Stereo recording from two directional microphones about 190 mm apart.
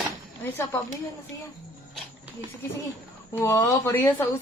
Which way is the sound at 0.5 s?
15° left (ahead or behind).